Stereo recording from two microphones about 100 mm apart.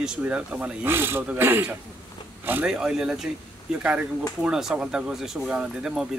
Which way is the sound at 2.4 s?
20° right (ahead or behind).